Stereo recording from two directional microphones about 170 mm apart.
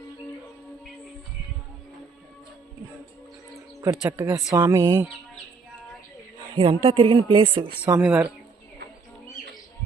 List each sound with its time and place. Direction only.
3.8 s speech: 15° right (ahead or behind)
6.6 s a woman's voice: 30° right (ahead or behind)
7.9 s speech: 10° right (ahead or behind)